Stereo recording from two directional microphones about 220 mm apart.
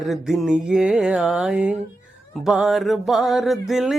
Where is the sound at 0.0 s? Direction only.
Centre (ahead or behind).